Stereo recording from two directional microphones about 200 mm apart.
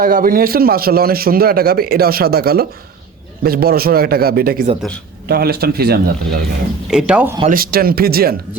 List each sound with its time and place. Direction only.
0.0 s a man's voice: 45° right (ahead or behind)
6.9 s speech: 5° right (ahead or behind)
7.4 s a man's voice: 45° right (ahead or behind)